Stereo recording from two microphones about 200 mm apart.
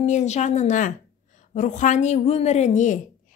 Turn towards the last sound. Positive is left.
turn(degrees=40)  # may be behind; listen again after turning